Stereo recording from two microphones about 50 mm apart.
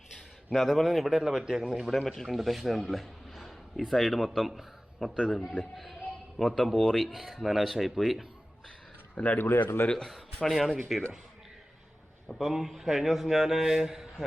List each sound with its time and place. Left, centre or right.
0.5 s a man's voice: centre
9.1 s speech: left
9.4 s speech: left
10.4 s a man's voice: centre
12.5 s a man's voice: centre